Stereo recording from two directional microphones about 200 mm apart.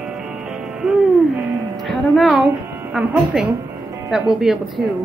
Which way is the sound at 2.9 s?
5° right (ahead or behind).